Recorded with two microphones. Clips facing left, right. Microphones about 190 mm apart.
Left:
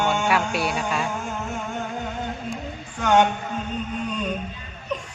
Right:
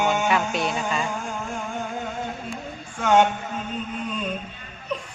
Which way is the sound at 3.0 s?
5° right (ahead or behind).